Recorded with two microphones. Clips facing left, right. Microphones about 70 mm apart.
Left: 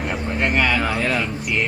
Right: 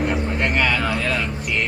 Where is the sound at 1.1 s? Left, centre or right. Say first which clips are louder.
Left 1 dB; centre.